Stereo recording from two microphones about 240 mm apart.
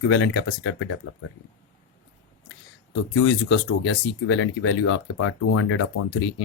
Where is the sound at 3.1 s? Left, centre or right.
Left.